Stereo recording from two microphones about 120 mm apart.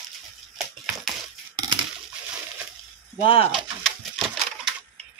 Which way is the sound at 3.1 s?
50° left (ahead or behind).